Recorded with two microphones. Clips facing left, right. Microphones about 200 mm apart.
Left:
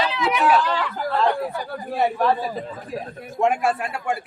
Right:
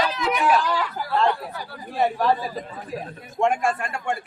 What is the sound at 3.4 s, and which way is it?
Speech, 5° left (ahead or behind).